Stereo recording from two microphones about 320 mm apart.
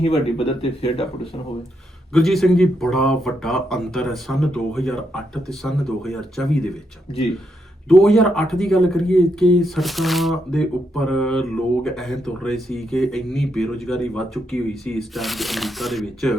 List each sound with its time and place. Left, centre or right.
0.0 s speech: centre
2.1 s speech: centre
7.9 s speech: centre